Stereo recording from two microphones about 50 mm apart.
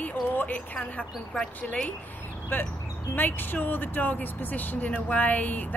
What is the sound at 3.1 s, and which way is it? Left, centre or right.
Speech, left.